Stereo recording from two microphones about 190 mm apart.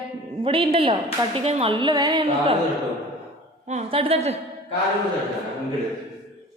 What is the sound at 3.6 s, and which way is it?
Speech, 35° right (ahead or behind).